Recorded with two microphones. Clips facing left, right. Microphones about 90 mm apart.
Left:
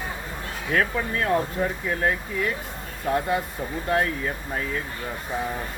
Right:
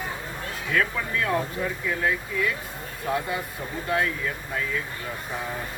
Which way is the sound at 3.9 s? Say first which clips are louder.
Left 2 dB; 40° left (ahead or behind).